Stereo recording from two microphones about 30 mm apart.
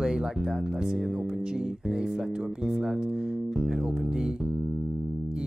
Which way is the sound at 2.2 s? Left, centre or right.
Right.